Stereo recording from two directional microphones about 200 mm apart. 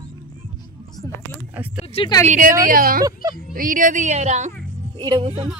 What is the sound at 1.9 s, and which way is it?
Speech, 20° left (ahead or behind).